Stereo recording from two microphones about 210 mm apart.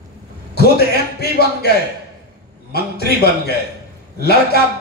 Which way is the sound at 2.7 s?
50° left (ahead or behind).